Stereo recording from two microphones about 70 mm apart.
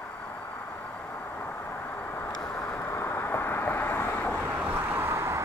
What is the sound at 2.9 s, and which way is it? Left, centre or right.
Vehicle, left.